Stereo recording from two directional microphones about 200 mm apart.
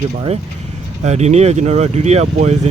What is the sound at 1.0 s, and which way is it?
Speech, 35° right (ahead or behind).